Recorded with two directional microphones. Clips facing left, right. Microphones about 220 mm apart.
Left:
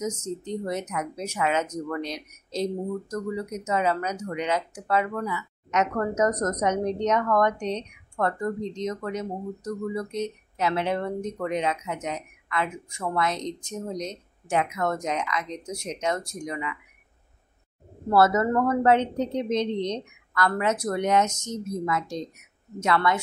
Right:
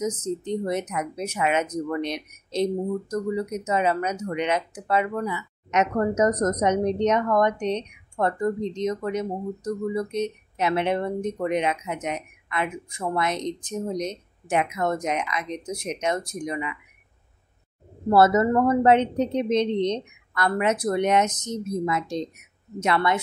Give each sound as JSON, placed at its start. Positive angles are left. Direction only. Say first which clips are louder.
{"t": 0.0, "sound": "speech", "louder": "right 3 dB", "side_deg": -20}
{"t": 18.1, "sound": "speech", "louder": "right 3 dB", "side_deg": -20}